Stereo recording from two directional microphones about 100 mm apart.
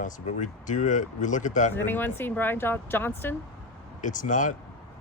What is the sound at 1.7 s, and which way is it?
Speech, 20° left (ahead or behind).